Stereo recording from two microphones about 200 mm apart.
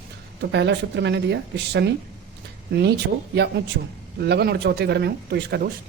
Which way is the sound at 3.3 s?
55° right (ahead or behind).